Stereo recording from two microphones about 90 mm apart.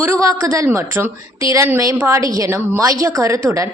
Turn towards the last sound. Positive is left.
turn(degrees=-35)  # may be behind; listen again after turning